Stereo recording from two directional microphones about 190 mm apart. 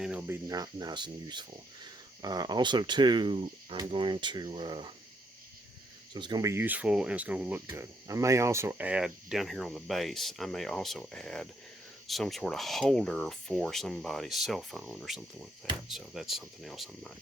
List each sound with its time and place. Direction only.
0.0 s cricket: 5° right (ahead or behind)
0.4 s speech: 20° right (ahead or behind)
6.1 s speech: 20° right (ahead or behind); by 17.1 s centre (ahead or behind)